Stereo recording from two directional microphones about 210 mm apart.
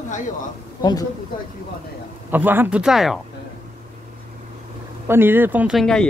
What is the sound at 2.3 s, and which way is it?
Speech, 10° right (ahead or behind).